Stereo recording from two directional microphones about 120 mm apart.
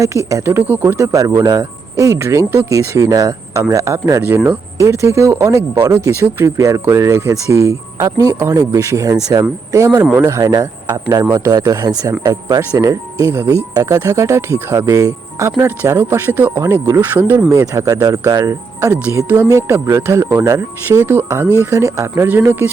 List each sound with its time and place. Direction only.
0.0 s speech: 25° right (ahead or behind)
17.5 s speech: 25° right (ahead or behind)
19.1 s speech: 15° right (ahead or behind)
19.5 s speech: 25° right (ahead or behind)